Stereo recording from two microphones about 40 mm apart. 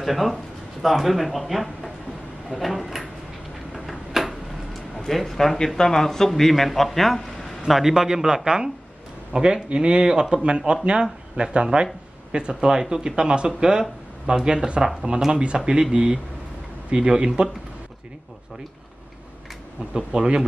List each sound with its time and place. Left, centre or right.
0.0 s speech: centre
3.7 s tick-tock: centre
4.9 s a man's voice: centre
7.4 s a sound: centre
7.9 s speech: centre
20.1 s speech: right